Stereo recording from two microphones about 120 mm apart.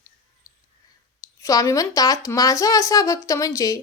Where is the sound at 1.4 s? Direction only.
30° left (ahead or behind).